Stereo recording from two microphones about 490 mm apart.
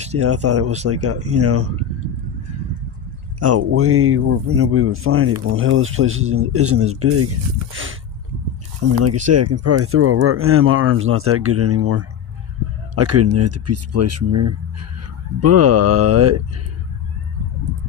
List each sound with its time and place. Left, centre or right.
0.2 s speech: right
3.4 s speech: right